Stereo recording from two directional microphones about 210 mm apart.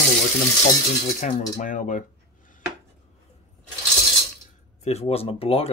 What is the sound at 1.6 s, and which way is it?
Speech, 35° left (ahead or behind).